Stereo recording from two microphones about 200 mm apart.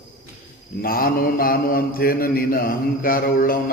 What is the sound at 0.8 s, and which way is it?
Mantra, 45° left (ahead or behind).